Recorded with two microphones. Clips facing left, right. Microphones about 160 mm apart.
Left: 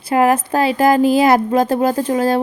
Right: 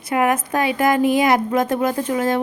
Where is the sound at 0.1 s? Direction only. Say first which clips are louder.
Left 4 dB; 30° left (ahead or behind).